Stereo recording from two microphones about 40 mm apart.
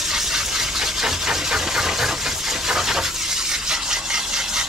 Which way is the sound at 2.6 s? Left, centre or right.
Centre.